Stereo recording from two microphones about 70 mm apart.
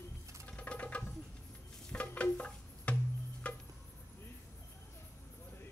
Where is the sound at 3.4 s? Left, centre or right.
Centre.